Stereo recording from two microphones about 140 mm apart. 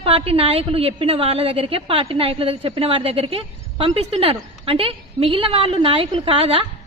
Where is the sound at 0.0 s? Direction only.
45° right (ahead or behind).